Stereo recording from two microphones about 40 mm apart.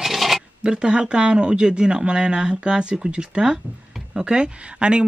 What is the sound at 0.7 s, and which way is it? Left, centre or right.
Speech, right.